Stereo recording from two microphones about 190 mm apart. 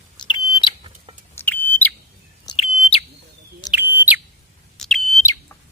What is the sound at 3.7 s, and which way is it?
Bird, 10° right (ahead or behind).